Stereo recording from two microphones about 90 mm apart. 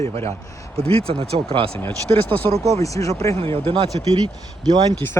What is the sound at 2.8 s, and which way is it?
Speech, 35° left (ahead or behind).